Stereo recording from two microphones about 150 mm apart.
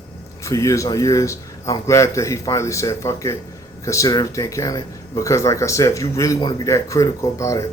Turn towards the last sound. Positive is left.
turn(degrees=20)  # may be behind; listen again after turning